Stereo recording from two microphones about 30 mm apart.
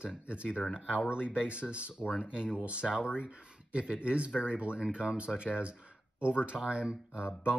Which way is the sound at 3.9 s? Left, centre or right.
Right.